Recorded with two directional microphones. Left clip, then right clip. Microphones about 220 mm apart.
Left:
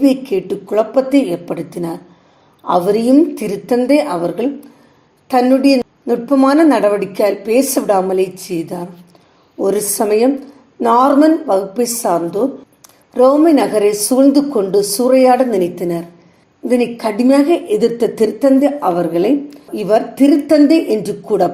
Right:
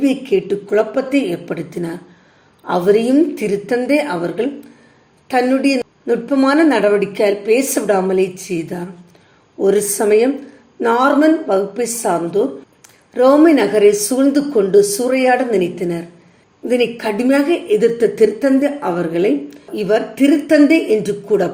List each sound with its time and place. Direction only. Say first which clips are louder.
0.0 s a woman's voice: left 2 dB; 20° left (ahead or behind)
13.5 s a woman's voice: right 1 dB; 20° left (ahead or behind)